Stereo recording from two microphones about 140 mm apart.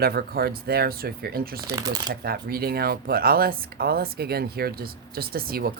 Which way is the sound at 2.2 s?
90° right.